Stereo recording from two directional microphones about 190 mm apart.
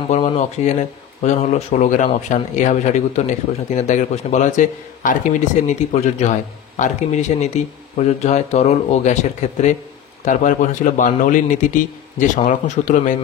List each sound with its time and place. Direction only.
0.1 s a man's voice: 35° left (ahead or behind)